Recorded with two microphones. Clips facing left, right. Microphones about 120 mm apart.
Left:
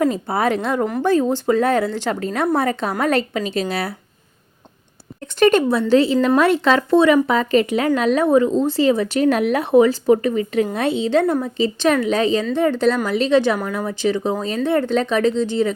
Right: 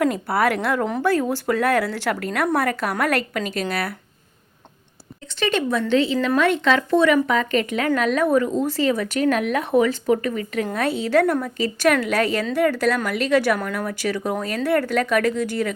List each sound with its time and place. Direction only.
0.3 s speech: 20° left (ahead or behind)
5.2 s speech: 45° left (ahead or behind); by 15.7 s 25° left (ahead or behind)